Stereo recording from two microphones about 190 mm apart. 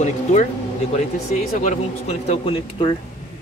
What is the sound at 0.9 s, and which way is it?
Speech, 40° left (ahead or behind).